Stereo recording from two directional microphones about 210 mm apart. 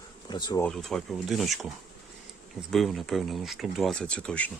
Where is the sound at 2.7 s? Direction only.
Centre (ahead or behind).